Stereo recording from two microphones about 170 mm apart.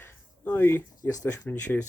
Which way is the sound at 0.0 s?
10° left (ahead or behind).